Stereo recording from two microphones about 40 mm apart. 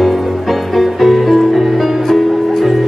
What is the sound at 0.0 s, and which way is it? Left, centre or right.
Music, centre.